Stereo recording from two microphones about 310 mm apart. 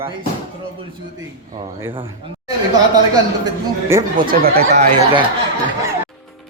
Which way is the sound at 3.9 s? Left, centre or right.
Centre.